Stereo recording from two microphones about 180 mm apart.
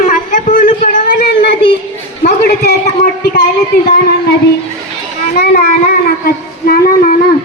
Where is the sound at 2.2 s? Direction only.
60° left (ahead or behind).